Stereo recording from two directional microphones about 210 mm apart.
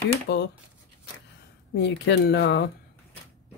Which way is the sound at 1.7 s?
55° left (ahead or behind).